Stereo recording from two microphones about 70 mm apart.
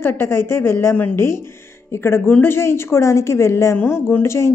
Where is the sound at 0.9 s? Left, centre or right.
Left.